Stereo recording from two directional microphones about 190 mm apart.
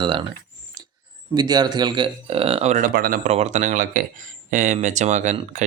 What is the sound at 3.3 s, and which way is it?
Speech, 35° right (ahead or behind).